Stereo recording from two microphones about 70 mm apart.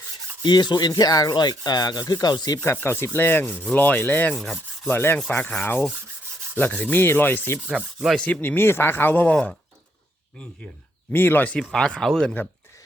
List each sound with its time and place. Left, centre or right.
0.4 s rub: left
2.6 s rub: left
3.5 s speech: centre
4.9 s rub: left
5.3 s speech: left
6.7 s rub: left
7.7 s sanding: centre
8.2 s speech: left
11.1 s rub: left
11.7 s speech: centre
12.4 s rub: left